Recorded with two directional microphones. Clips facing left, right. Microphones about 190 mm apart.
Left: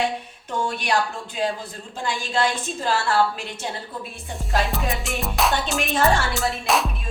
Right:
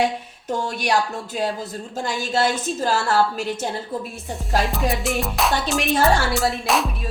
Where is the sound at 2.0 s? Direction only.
40° right (ahead or behind).